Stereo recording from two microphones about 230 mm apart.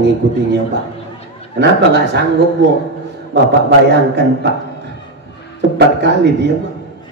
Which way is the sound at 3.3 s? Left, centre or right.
Right.